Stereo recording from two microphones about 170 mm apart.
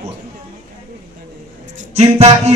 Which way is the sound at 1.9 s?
40° right (ahead or behind).